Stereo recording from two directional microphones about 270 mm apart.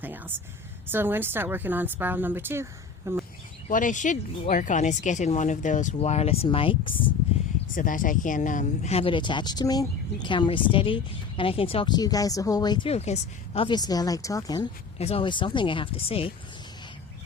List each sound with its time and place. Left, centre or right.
0.0 s a woman's voice: centre
3.7 s speech: left
7.8 s speech: left